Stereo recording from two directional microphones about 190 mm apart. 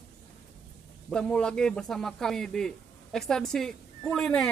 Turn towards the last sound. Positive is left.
turn(degrees=0)  # may be behind; listen again after turning